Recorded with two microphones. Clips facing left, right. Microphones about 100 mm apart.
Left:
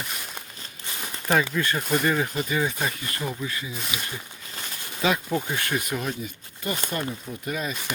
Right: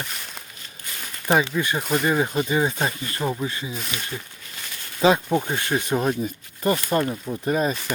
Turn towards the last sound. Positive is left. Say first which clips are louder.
# right 8 dB
turn(degrees=-35)  # may be behind; listen again after turning